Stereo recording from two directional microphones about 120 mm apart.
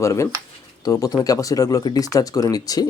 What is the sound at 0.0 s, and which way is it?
Speech, 25° left (ahead or behind).